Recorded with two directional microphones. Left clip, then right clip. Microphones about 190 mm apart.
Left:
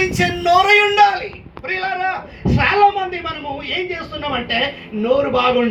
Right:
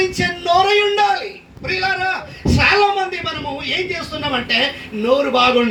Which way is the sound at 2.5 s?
40° left (ahead or behind).